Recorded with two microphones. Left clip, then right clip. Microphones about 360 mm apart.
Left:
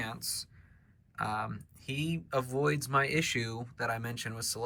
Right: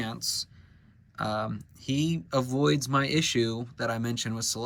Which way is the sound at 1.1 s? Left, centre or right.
Centre.